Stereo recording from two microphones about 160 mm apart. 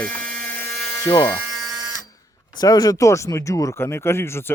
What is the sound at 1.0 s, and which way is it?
Electric toothbrush, 20° left (ahead or behind).